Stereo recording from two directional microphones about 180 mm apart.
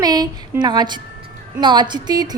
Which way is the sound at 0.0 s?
20° right (ahead or behind).